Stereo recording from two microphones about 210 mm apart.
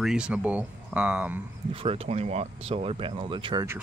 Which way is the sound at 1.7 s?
25° right (ahead or behind).